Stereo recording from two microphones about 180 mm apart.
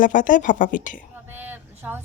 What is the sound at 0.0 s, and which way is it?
A woman's voice, 45° left (ahead or behind).